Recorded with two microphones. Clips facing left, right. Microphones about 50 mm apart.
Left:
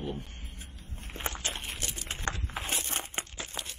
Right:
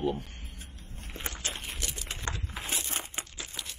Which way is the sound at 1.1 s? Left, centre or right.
Left.